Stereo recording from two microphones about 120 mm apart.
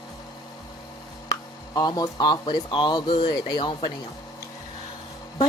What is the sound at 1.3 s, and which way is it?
Speech, 30° left (ahead or behind).